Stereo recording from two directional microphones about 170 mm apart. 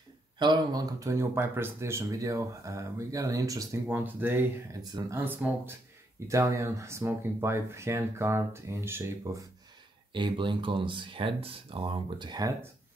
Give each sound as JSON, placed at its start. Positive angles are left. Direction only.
{"t": 0.4, "sound": "speech", "side_deg": -25}
{"t": 10.1, "sound": "speech", "side_deg": -30}